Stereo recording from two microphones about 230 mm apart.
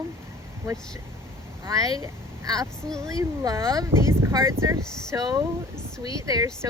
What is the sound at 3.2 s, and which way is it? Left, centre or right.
Speech, centre.